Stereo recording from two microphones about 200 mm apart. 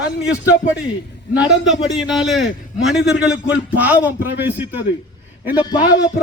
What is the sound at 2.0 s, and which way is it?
A man's voice, centre (ahead or behind).